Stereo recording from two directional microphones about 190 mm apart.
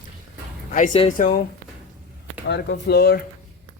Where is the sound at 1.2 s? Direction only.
45° left (ahead or behind).